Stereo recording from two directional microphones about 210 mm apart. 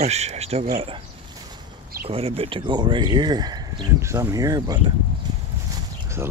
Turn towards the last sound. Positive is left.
turn(degrees=-10)  # may be behind; listen again after turning